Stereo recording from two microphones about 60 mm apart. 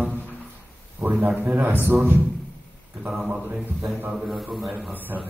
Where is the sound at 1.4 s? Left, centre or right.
Right.